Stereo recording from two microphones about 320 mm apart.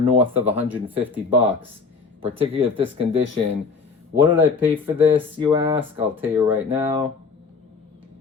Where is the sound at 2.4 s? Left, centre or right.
Centre.